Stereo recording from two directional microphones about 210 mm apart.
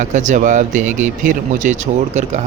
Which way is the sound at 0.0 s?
35° right (ahead or behind).